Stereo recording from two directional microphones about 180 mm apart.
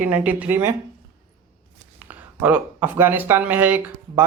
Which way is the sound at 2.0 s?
10° right (ahead or behind).